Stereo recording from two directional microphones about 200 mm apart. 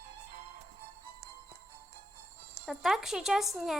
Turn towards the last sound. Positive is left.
turn(degrees=0)  # may be behind; listen again after turning